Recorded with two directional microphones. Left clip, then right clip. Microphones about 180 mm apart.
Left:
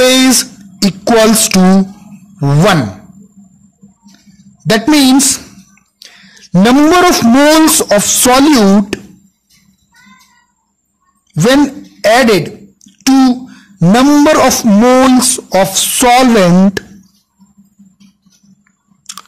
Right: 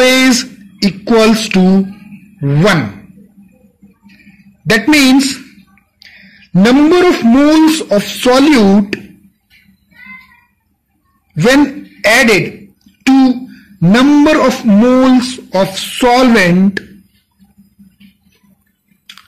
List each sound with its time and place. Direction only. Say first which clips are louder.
0.0 s a sound: left 1 dB; 65° left (ahead or behind)
4.6 s speech: even; 55° left (ahead or behind)
11.3 s speech: even; 50° left (ahead or behind)